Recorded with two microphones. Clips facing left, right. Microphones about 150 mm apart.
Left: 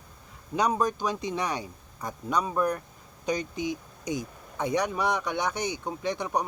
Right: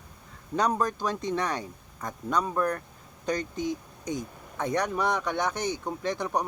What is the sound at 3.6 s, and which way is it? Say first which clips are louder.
Speech: even; 90° left.